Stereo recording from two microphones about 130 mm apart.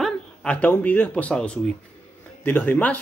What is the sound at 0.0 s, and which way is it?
Speech, 5° left (ahead or behind).